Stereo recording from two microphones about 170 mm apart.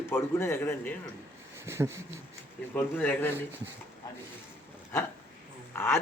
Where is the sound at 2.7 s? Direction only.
10° left (ahead or behind).